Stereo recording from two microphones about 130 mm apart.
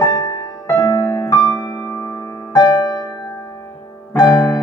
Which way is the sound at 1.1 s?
35° left (ahead or behind).